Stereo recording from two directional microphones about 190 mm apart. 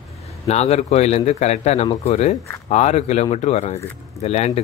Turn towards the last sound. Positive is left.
turn(degrees=35)  # may be behind; listen again after turning